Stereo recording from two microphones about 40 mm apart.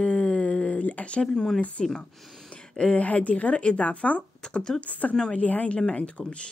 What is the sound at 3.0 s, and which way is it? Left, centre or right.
Speech, left.